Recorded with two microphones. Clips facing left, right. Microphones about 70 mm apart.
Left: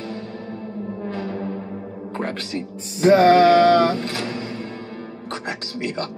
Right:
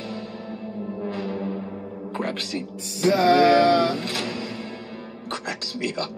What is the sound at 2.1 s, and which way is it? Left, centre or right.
Speech, left.